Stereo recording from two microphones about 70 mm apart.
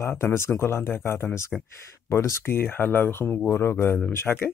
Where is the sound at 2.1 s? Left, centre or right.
Left.